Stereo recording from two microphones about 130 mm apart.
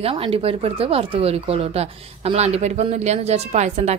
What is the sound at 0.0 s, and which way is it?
Speech, 50° right (ahead or behind).